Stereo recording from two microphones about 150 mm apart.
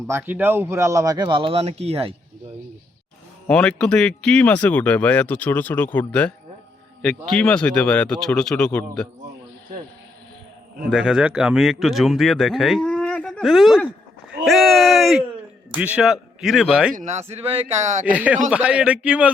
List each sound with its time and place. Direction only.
0.1 s speech: 10° right (ahead or behind); by 2.1 s 40° right (ahead or behind)
3.4 s speech: 5° left (ahead or behind)
10.9 s speech: 5° right (ahead or behind)
14.3 s a sound: centre (ahead or behind)
15.7 s speech: 10° right (ahead or behind)
16.9 s a man's voice: 50° right (ahead or behind)
18.0 s a man's voice: 10° right (ahead or behind)